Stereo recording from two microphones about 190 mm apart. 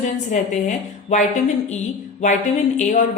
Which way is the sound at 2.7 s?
40° left (ahead or behind).